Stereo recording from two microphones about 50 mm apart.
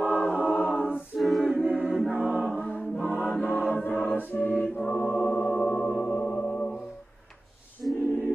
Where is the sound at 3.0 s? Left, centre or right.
Left.